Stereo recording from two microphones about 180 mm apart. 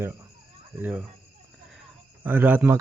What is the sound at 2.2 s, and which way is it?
Speech, 10° right (ahead or behind).